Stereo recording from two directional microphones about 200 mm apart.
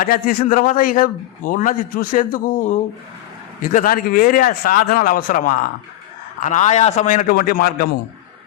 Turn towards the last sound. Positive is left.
turn(degrees=45)  # may be behind; listen again after turning